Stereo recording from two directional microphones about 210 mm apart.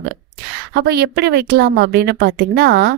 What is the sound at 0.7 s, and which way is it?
A woman's voice, 50° right (ahead or behind).